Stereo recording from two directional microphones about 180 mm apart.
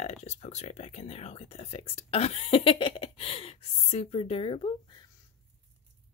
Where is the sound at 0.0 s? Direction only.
40° left (ahead or behind).